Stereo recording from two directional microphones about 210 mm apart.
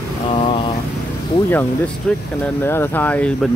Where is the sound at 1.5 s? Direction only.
5° left (ahead or behind).